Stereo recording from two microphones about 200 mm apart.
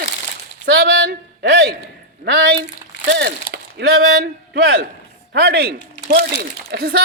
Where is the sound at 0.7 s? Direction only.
55° right (ahead or behind).